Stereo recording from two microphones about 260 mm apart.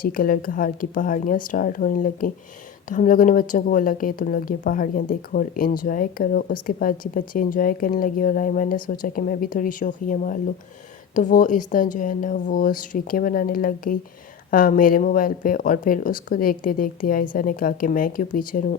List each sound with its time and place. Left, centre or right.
0.0 s a woman's voice: left